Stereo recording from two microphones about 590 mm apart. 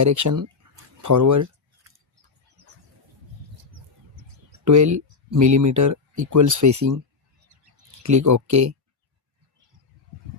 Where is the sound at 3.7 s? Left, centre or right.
Right.